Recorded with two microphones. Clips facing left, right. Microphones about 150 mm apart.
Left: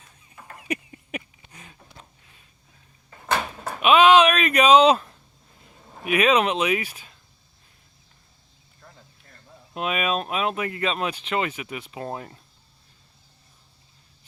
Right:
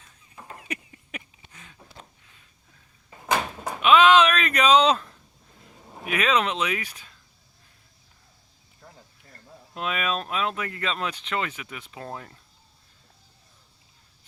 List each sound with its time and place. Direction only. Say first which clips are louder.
0.7 s a sound: left 8 dB; 15° left (ahead or behind)
3.1 s cupboard open or close: even; 10° right (ahead or behind)
3.8 s speech: left 2 dB; 15° left (ahead or behind)
5.8 s a sound: even; 5° right (ahead or behind)
6.1 s speech: left 4 dB; 15° left (ahead or behind)
9.7 s speech: left 3 dB; 15° left (ahead or behind)